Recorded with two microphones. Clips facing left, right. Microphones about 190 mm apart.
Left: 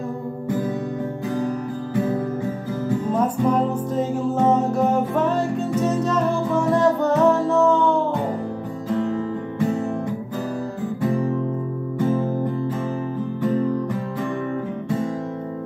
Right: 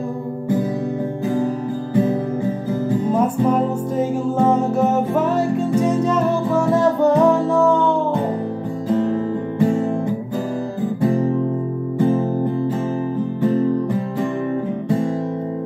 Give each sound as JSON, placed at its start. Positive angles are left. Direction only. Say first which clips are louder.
{"t": 3.1, "sound": "music", "louder": "right 2 dB", "side_deg": -10}
{"t": 11.0, "sound": "guitar", "louder": "right 4 dB", "side_deg": -35}
{"t": 12.0, "sound": "music", "louder": "right 4 dB", "side_deg": -30}